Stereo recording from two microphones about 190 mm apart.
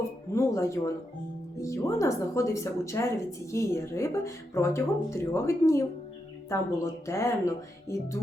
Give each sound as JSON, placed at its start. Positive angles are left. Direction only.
{"t": 0.3, "sound": "speech", "side_deg": 15}